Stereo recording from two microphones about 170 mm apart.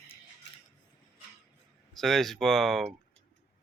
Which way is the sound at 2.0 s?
Centre (ahead or behind).